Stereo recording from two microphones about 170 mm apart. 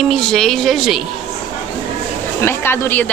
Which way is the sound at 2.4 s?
15° left (ahead or behind).